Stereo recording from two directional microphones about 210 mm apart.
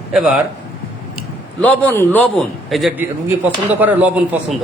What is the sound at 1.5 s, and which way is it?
A man's voice, 10° left (ahead or behind).